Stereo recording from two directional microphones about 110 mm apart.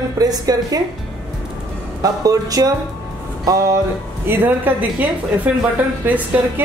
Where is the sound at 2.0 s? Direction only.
35° right (ahead or behind).